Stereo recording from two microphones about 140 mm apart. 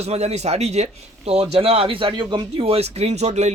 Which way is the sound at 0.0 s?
50° right (ahead or behind).